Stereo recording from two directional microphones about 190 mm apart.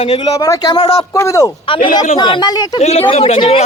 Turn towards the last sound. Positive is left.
turn(degrees=30)  # may be behind; listen again after turning